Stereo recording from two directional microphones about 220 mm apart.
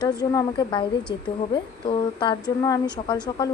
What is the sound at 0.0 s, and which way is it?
A woman's voice, 20° left (ahead or behind).